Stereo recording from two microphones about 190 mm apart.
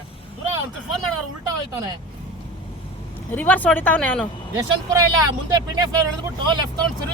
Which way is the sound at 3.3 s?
10° left (ahead or behind).